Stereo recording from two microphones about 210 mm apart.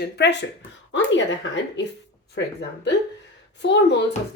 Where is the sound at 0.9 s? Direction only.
60° left (ahead or behind).